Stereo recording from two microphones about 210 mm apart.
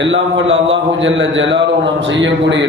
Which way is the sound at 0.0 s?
65° right (ahead or behind).